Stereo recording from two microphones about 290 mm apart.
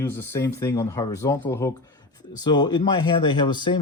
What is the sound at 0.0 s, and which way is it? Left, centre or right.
Speech, centre.